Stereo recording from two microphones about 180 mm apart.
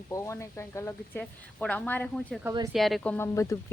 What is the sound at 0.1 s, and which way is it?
Speech, 15° left (ahead or behind).